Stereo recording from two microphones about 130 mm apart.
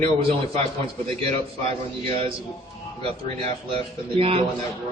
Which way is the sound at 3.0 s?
50° right (ahead or behind).